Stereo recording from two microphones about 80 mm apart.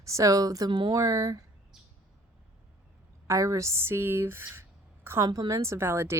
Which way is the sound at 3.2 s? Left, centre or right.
Right.